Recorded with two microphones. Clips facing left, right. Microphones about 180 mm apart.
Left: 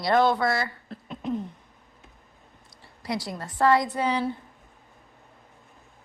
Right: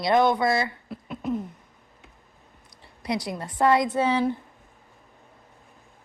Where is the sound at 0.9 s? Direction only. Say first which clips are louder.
Right 2 dB; 10° right (ahead or behind).